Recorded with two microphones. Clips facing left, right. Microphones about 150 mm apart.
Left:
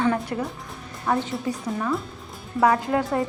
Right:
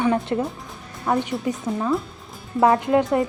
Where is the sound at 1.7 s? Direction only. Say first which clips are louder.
Right 4 dB; 20° right (ahead or behind).